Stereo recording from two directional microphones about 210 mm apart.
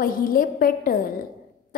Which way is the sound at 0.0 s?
40° left (ahead or behind).